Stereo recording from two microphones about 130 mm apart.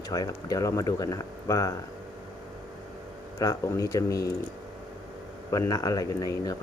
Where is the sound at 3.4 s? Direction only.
25° left (ahead or behind).